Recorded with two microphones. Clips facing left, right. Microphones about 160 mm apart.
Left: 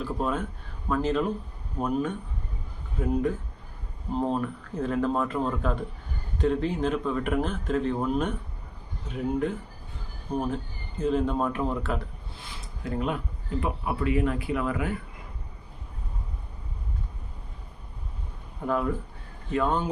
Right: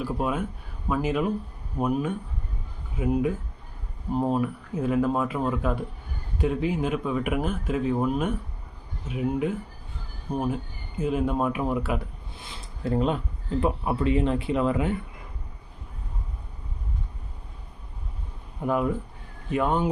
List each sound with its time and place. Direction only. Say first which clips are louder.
0.0 s speech: right 1 dB; 10° right (ahead or behind)
12.8 s speech: right 5 dB; 30° right (ahead or behind)
18.6 s speech: right 2 dB; 15° right (ahead or behind)